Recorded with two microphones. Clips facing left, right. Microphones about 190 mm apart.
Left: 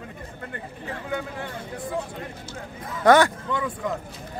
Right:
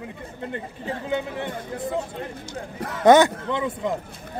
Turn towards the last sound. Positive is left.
turn(degrees=-20)  # may be behind; listen again after turning